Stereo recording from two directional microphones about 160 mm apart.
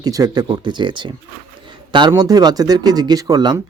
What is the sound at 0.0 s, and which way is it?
Speech, 25° right (ahead or behind).